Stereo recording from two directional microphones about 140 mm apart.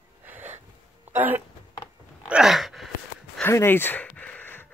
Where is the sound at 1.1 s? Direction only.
15° right (ahead or behind).